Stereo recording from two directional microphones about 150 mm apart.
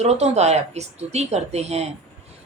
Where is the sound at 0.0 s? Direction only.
45° right (ahead or behind).